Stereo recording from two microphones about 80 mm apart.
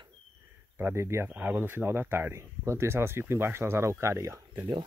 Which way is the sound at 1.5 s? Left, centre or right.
Right.